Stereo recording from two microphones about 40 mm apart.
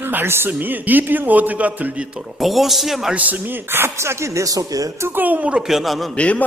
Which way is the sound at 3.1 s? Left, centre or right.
Right.